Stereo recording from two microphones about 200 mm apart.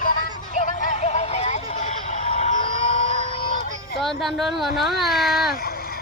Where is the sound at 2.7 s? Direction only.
35° right (ahead or behind).